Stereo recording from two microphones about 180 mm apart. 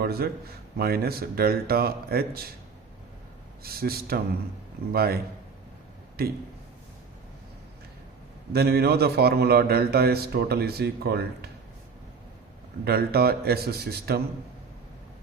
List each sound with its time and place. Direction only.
0.0 s a man's voice: 60° right (ahead or behind)
3.6 s a man's voice: 55° right (ahead or behind)
8.5 s a man's voice: 60° right (ahead or behind)
12.8 s a man's voice: 60° right (ahead or behind)